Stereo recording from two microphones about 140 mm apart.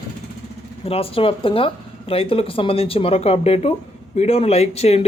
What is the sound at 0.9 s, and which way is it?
Speech, 40° left (ahead or behind).